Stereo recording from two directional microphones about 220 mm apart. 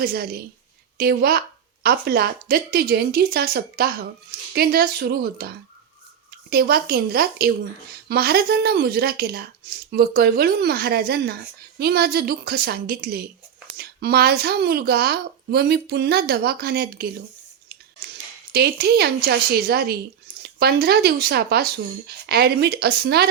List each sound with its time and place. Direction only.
0.0 s speech: 45° right (ahead or behind)
18.5 s speech: 45° right (ahead or behind)